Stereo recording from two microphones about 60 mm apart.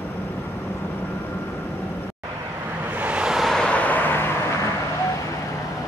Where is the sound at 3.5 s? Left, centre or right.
Centre.